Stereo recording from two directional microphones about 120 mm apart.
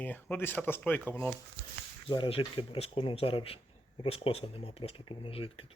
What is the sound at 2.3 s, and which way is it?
Speech, 50° left (ahead or behind).